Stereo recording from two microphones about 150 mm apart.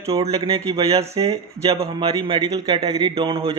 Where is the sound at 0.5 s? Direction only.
40° right (ahead or behind).